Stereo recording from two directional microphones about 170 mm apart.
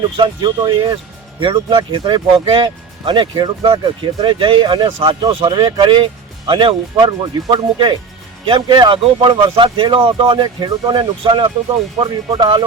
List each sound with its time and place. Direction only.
0.2 s speech: 25° right (ahead or behind)